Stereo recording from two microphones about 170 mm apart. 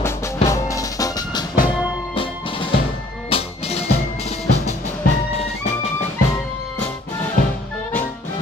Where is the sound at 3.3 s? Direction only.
35° left (ahead or behind).